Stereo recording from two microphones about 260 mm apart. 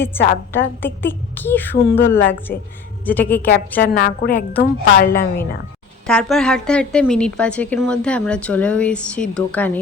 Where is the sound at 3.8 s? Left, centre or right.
Left.